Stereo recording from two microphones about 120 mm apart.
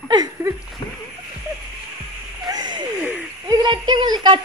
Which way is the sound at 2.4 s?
35° right (ahead or behind).